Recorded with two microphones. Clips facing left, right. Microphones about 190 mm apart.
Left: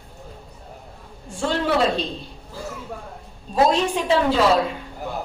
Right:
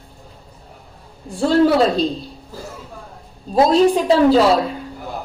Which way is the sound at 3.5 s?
35° right (ahead or behind).